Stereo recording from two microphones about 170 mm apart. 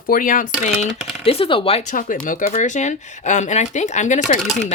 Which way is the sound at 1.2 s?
35° left (ahead or behind).